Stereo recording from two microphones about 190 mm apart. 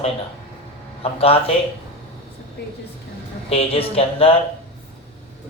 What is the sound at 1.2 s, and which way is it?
Speech, 30° left (ahead or behind).